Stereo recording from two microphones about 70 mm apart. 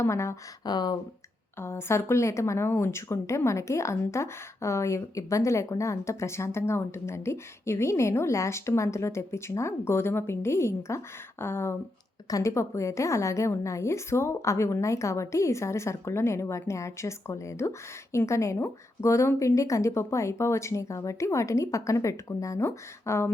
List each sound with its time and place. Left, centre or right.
0.0 s a woman's voice: left
0.6 s speech: left
1.5 s a woman's voice: left